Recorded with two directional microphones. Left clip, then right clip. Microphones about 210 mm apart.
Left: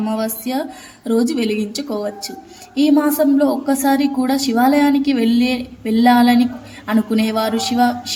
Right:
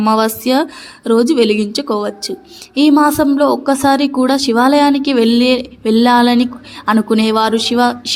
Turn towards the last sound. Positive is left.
turn(degrees=-25)  # may be behind; listen again after turning